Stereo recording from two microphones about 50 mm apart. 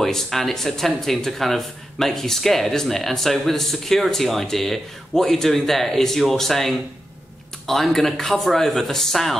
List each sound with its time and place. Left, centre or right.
0.0 s speech: centre